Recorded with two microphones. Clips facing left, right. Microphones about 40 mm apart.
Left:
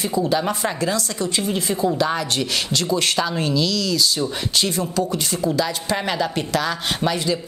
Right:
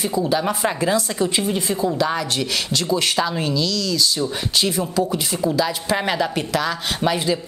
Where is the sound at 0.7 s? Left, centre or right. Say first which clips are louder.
Right 3 dB; centre.